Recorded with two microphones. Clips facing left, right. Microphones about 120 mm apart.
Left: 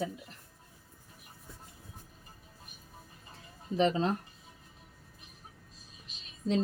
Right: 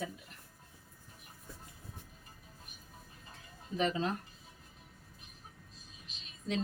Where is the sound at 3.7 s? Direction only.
30° left (ahead or behind).